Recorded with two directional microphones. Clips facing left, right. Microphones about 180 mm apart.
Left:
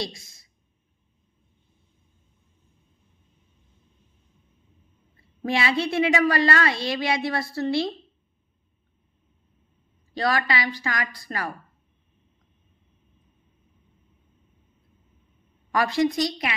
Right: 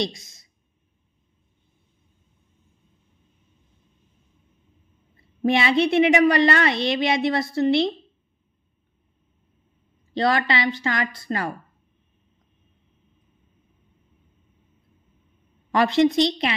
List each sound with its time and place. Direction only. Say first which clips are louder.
5.4 s a woman's voice: right 5 dB; 20° right (ahead or behind)
10.1 s a woman's voice: right 3 dB; 25° right (ahead or behind)
15.7 s a woman's voice: right 4 dB; 25° right (ahead or behind)